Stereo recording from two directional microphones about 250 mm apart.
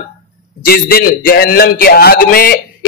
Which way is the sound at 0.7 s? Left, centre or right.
Left.